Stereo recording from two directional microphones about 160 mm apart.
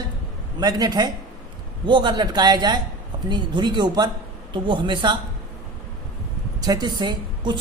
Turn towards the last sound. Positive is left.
turn(degrees=-30)  # may be behind; listen again after turning